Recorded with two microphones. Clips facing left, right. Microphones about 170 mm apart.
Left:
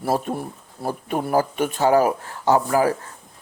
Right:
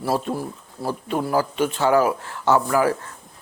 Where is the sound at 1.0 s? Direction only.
50° left (ahead or behind).